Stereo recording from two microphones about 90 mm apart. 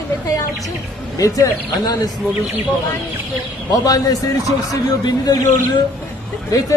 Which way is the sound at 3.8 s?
45° left (ahead or behind).